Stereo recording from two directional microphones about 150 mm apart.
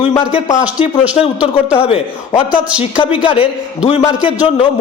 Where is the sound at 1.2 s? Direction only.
40° left (ahead or behind).